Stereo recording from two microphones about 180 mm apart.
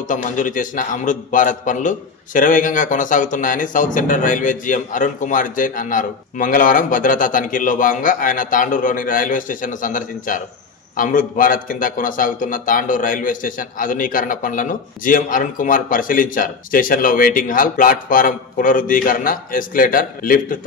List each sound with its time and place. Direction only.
0.1 s a man's voice: 45° left (ahead or behind)